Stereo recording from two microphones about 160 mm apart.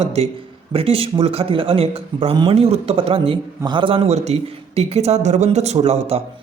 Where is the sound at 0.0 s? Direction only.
40° right (ahead or behind).